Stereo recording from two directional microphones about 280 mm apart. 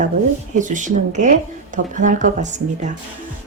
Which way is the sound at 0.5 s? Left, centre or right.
Right.